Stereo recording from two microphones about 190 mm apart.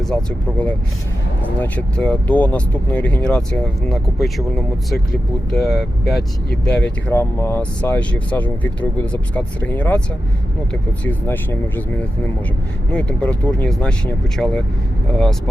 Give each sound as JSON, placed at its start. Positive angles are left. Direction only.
{"t": 0.0, "sound": "speech", "side_deg": 5}
{"t": 6.1, "sound": "speech", "side_deg": 55}
{"t": 6.7, "sound": "speech", "side_deg": 10}
{"t": 12.9, "sound": "speech", "side_deg": 5}